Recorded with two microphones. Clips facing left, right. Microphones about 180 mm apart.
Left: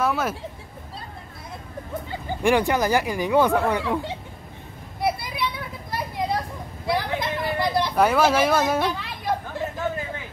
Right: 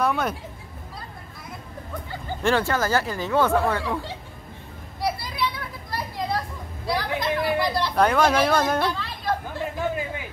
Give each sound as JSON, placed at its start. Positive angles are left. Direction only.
{"t": 0.0, "sound": "speech", "side_deg": 5}
{"t": 2.0, "sound": "speech", "side_deg": 15}
{"t": 5.0, "sound": "children playing", "side_deg": 20}
{"t": 6.9, "sound": "speech", "side_deg": 20}
{"t": 8.0, "sound": "speech", "side_deg": 5}
{"t": 9.0, "sound": "chatter", "side_deg": 15}